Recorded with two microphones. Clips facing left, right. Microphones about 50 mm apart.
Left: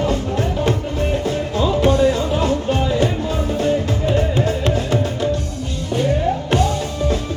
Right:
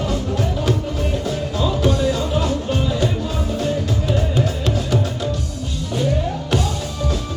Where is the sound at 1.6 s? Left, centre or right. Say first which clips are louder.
Left 4 dB; left.